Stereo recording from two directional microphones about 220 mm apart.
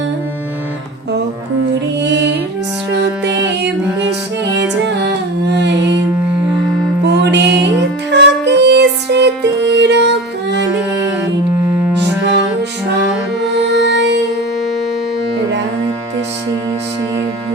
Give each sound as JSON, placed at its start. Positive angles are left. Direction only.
{"t": 2.0, "sound": "music", "side_deg": -50}
{"t": 5.5, "sound": "music", "side_deg": -50}
{"t": 7.0, "sound": "music", "side_deg": -50}
{"t": 13.6, "sound": "music", "side_deg": -50}